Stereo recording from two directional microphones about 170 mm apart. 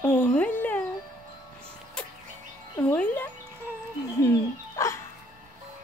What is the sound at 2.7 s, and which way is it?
Music, 10° left (ahead or behind).